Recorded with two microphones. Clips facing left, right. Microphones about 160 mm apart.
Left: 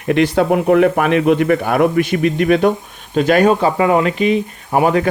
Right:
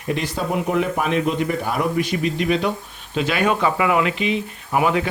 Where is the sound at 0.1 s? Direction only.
70° left (ahead or behind); by 3.5 s 45° left (ahead or behind).